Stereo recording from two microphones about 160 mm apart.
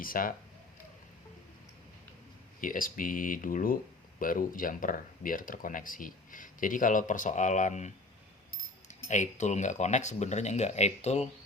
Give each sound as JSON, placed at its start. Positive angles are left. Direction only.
{"t": 0.0, "sound": "speech", "side_deg": 60}
{"t": 2.6, "sound": "speech", "side_deg": 60}